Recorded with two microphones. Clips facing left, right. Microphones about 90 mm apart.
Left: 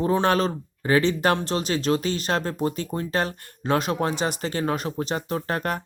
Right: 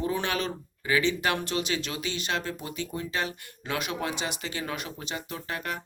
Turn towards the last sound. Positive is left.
turn(degrees=45)  # may be behind; listen again after turning